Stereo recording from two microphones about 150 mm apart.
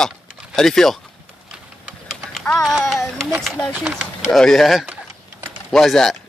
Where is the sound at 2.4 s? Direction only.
Centre (ahead or behind).